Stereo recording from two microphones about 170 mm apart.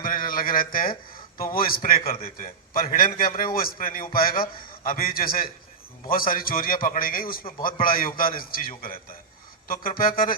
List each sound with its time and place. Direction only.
0.0 s a sound: 55° left (ahead or behind)
1.5 s a man's voice: 60° left (ahead or behind)
10.0 s a man's voice: 55° left (ahead or behind)